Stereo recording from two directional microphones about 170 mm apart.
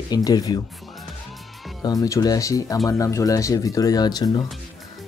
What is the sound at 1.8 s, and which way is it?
Speech, 20° left (ahead or behind).